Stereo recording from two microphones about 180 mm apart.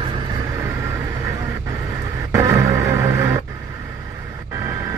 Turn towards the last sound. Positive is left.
turn(degrees=-20)  # may be behind; listen again after turning